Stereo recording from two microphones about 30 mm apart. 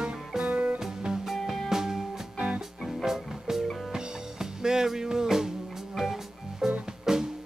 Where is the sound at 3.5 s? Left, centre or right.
Right.